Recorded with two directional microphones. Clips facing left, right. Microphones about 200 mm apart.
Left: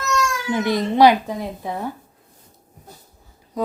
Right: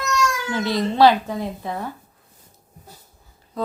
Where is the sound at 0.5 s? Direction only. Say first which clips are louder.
Left 4 dB; 20° left (ahead or behind).